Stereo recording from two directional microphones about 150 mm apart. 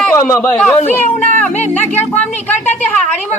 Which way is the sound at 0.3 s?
10° left (ahead or behind).